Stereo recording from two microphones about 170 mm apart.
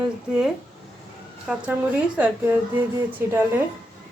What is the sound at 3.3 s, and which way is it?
Speech, 10° right (ahead or behind).